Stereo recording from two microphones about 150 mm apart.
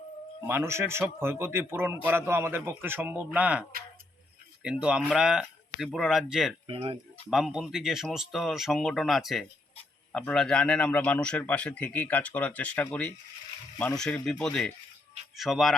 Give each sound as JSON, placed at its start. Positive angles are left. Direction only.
{"t": 0.4, "sound": "speech", "side_deg": -15}
{"t": 6.7, "sound": "speech", "side_deg": -35}
{"t": 7.3, "sound": "a man's voice", "side_deg": 0}